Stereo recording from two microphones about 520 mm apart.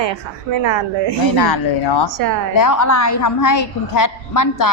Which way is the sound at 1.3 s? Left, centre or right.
Left.